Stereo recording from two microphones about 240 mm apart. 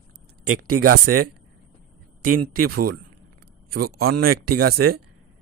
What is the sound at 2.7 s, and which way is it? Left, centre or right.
Speech, right.